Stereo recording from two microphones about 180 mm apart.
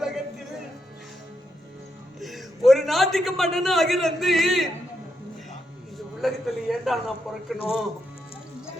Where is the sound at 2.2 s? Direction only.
Centre (ahead or behind).